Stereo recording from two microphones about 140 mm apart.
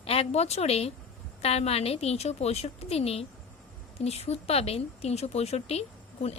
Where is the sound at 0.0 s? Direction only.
45° left (ahead or behind).